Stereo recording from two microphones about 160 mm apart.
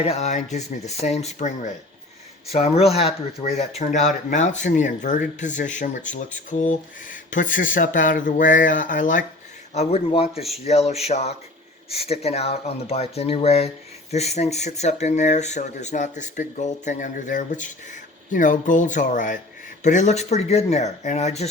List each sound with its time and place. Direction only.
0.0 s speech: 40° left (ahead or behind)
9.7 s speech: 40° left (ahead or behind)